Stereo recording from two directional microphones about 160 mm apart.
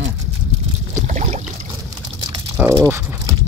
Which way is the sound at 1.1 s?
45° right (ahead or behind).